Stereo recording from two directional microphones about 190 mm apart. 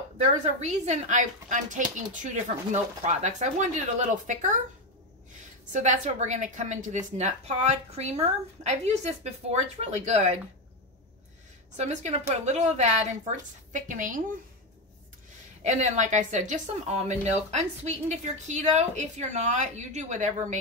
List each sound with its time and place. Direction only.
0.6 s speech: 40° right (ahead or behind)
5.7 s speech: 40° right (ahead or behind)
11.7 s speech: 35° right (ahead or behind)
15.6 s speech: 40° right (ahead or behind)